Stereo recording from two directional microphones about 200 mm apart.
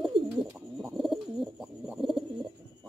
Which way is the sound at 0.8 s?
Centre (ahead or behind).